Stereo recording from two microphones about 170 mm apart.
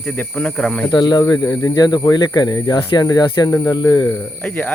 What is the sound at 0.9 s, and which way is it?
Speech, 25° left (ahead or behind).